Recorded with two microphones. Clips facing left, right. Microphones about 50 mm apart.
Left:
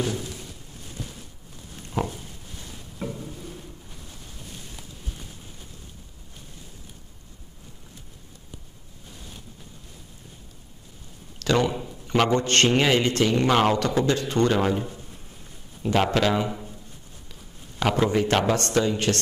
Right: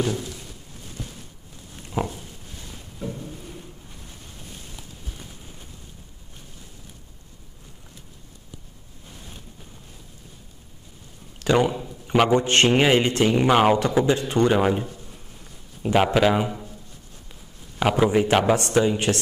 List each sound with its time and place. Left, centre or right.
2.0 s a sound: centre
11.4 s a man's voice: centre
17.7 s a man's voice: centre